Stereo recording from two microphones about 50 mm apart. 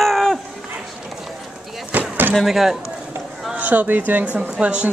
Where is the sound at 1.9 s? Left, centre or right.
Right.